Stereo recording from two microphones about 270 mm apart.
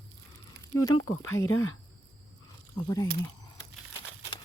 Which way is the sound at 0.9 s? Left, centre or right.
Left.